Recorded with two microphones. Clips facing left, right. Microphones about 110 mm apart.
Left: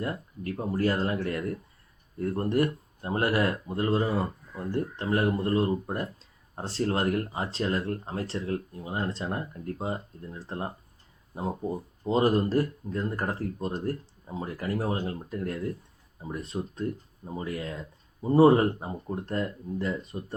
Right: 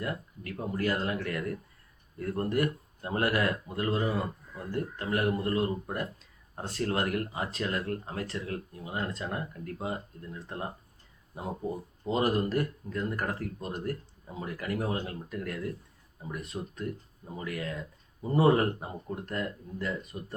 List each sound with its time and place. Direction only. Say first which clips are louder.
0.0 s speech: left 3 dB; 30° left (ahead or behind)